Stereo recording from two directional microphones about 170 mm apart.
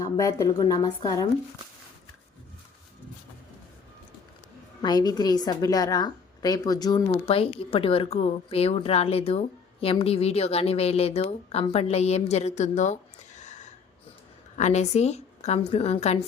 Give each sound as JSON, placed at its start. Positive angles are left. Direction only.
{"t": 0.0, "sound": "a woman's voice", "side_deg": 20}
{"t": 4.8, "sound": "a woman's voice", "side_deg": 25}
{"t": 14.6, "sound": "a woman's voice", "side_deg": 40}